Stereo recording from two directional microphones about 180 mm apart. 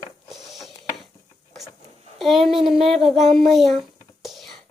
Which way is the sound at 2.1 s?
Centre (ahead or behind).